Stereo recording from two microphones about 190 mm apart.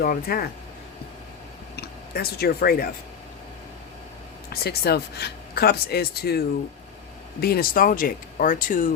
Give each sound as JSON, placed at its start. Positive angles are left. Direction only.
{"t": 0.0, "sound": "speech", "side_deg": 50}
{"t": 1.7, "sound": "speech", "side_deg": 55}
{"t": 4.4, "sound": "speech", "side_deg": 55}
{"t": 7.4, "sound": "speech", "side_deg": 50}